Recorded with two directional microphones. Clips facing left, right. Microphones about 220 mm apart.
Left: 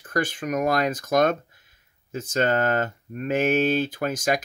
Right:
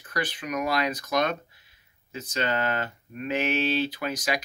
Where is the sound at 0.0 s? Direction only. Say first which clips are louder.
Left 5 dB; 45° left (ahead or behind).